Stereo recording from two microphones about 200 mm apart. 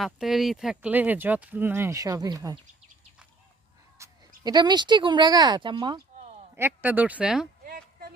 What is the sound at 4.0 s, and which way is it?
Speech, 20° right (ahead or behind).